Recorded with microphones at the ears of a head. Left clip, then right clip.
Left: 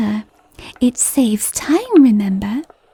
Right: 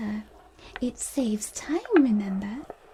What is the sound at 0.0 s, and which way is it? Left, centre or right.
A woman's voice, left.